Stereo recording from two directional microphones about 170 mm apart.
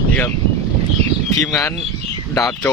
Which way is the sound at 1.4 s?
20° left (ahead or behind).